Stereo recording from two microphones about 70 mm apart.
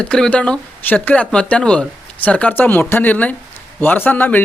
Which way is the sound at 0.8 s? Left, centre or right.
Left.